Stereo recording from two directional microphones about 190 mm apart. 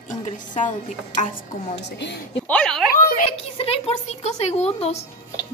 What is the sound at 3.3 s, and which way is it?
Speech, 30° left (ahead or behind).